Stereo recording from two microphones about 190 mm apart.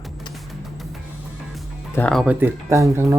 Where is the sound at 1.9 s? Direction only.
5° left (ahead or behind).